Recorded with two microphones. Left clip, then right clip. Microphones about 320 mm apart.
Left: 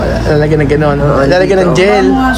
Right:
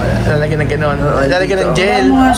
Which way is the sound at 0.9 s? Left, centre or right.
Centre.